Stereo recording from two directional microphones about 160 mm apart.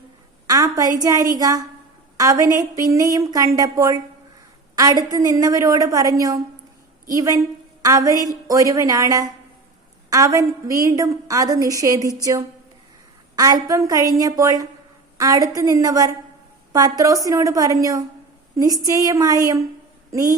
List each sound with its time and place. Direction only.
0.4 s a woman's voice: 20° right (ahead or behind)